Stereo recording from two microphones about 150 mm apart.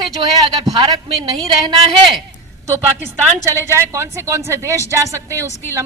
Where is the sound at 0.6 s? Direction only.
30° right (ahead or behind).